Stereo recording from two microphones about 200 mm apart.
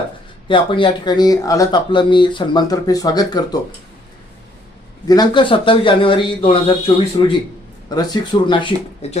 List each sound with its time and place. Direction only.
0.4 s speech: 25° left (ahead or behind)
5.0 s speech: 20° left (ahead or behind)